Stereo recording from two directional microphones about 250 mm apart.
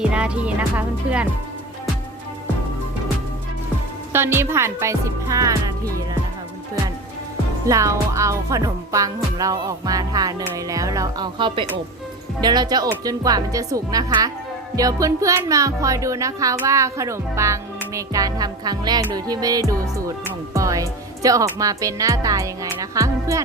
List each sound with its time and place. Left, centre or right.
0.1 s speech: centre
4.1 s music: centre
7.7 s music: centre